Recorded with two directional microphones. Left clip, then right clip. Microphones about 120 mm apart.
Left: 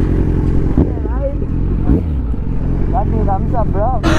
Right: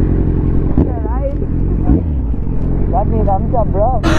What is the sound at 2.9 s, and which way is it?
Speech, 5° left (ahead or behind).